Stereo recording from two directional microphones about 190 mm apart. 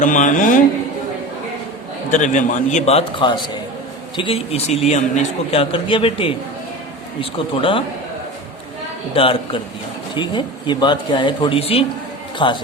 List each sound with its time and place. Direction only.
0.0 s speech: 40° left (ahead or behind)
2.0 s a man's voice: 40° left (ahead or behind)
9.1 s speech: 30° left (ahead or behind)